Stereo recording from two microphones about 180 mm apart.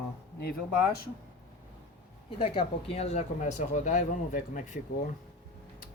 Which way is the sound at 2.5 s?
30° left (ahead or behind).